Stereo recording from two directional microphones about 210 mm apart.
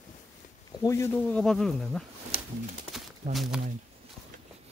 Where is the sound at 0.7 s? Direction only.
15° left (ahead or behind); by 2.1 s centre (ahead or behind).